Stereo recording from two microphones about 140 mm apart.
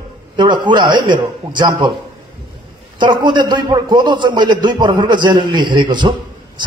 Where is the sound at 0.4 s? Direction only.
35° right (ahead or behind).